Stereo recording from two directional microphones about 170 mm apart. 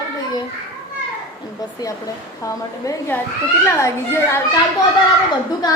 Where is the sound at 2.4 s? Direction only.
20° left (ahead or behind).